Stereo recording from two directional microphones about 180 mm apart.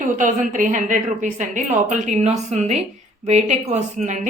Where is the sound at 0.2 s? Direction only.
45° right (ahead or behind).